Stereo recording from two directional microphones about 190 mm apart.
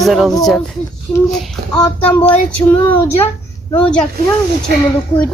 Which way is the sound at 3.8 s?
5° left (ahead or behind).